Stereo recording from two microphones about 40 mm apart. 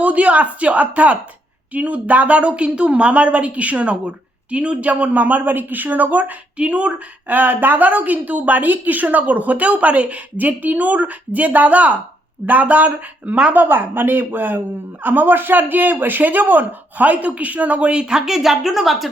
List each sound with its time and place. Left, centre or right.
0.0 s a man's voice: right
6.6 s speech: right
7.3 s a woman's voice: right
13.5 s a woman's voice: right; by 19.1 s centre